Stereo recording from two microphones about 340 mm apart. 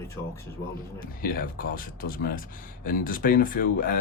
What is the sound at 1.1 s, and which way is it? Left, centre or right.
Speech, left.